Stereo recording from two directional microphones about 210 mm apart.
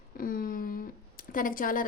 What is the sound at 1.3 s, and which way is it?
Speech, 40° left (ahead or behind).